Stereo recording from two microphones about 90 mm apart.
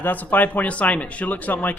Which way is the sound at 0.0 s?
20° left (ahead or behind).